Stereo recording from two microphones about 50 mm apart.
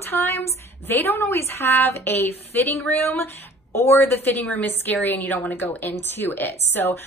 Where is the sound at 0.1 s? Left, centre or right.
Left.